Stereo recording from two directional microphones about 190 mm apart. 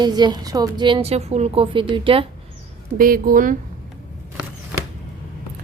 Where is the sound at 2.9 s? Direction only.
50° right (ahead or behind).